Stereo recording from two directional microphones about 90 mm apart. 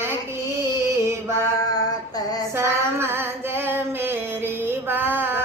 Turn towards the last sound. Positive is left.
turn(degrees=-25)  # may be behind; listen again after turning